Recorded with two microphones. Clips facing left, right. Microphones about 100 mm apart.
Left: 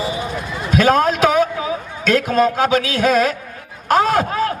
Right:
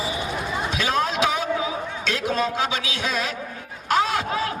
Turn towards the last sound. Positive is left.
turn(degrees=45)  # may be behind; listen again after turning